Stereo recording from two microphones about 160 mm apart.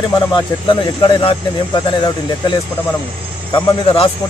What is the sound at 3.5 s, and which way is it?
Speech, 35° left (ahead or behind).